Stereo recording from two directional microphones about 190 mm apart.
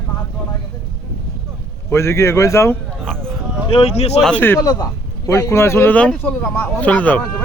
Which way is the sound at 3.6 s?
30° left (ahead or behind).